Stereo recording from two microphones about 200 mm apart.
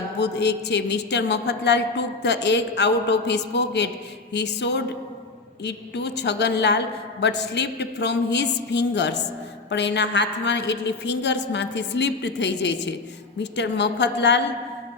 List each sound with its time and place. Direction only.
0.2 s a woman's voice: 55° left (ahead or behind)